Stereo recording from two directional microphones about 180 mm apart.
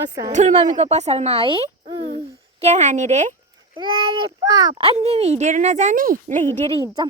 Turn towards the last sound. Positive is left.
turn(degrees=-35)  # may be behind; listen again after turning